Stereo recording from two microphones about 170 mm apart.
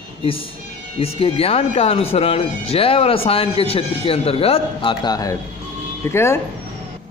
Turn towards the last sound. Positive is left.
turn(degrees=15)  # may be behind; listen again after turning